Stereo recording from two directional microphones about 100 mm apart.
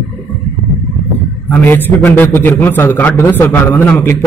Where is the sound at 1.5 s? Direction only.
20° left (ahead or behind).